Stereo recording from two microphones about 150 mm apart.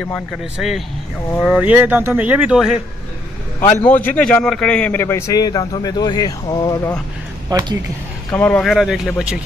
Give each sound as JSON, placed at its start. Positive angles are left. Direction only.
{"t": 0.0, "sound": "speech", "side_deg": 0}
{"t": 3.6, "sound": "a man's voice", "side_deg": 10}
{"t": 7.4, "sound": "speech", "side_deg": -25}
{"t": 8.3, "sound": "speech", "side_deg": 10}